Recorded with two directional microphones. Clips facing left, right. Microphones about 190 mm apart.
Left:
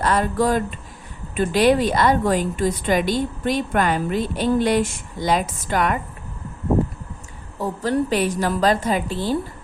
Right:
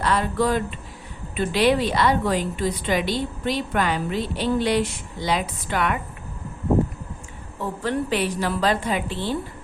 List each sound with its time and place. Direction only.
0.0 s a woman's voice: 45° left (ahead or behind)
7.6 s a woman's voice: 40° left (ahead or behind)